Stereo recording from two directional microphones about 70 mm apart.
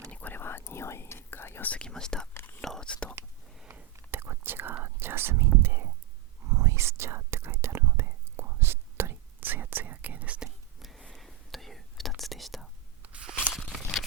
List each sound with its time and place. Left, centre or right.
0.1 s whispering: left
1.7 s speech: centre
2.3 s whispering: left
2.6 s speech: centre
4.1 s whispering: right
4.8 s speech: right
5.6 s whispering: right; by 10.5 s centre
10.8 s a sound: centre
11.1 s whispering: centre
13.0 s a sound: centre